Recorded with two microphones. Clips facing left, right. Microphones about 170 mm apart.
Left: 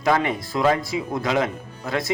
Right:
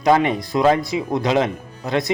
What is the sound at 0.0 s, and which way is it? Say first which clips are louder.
Speech: right 5 dB; 20° right (ahead or behind).